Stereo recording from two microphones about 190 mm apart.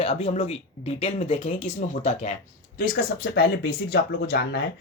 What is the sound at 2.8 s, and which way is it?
Speech, 50° left (ahead or behind).